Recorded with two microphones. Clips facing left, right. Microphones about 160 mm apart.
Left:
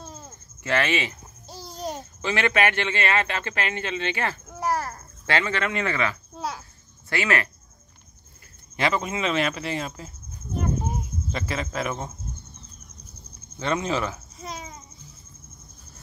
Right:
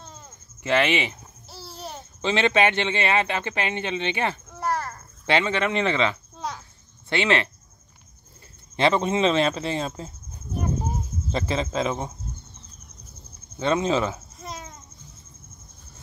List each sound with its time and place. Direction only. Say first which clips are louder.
0.0 s a sound: left 4 dB; 10° left (ahead or behind)
0.7 s speech: right 3 dB; 15° right (ahead or behind)
1.5 s babbling: left 5 dB; 15° left (ahead or behind)
2.2 s speech: right 2 dB; 20° right (ahead or behind)
4.6 s a sound: left 3 dB; 10° left (ahead or behind)
5.2 s speech: right 3 dB; 20° right (ahead or behind)
6.3 s a sound: left 1 dB; 10° left (ahead or behind)
7.1 s speech: right 3 dB; 25° right (ahead or behind)
8.7 s speech: right 5 dB; 25° right (ahead or behind)
11.3 s speech: right 4 dB; 25° right (ahead or behind)
13.6 s speech: right 3 dB; 20° right (ahead or behind)
14.4 s babbling: left 2 dB; centre (ahead or behind)